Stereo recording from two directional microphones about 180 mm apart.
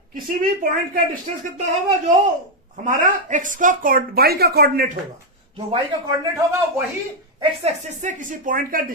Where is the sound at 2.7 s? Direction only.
45° right (ahead or behind).